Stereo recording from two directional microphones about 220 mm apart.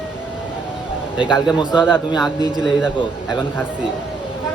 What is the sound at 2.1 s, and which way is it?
A man's voice, centre (ahead or behind).